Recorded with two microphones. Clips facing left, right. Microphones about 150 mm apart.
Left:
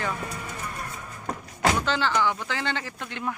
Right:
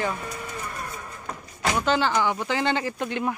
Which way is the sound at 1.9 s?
15° right (ahead or behind).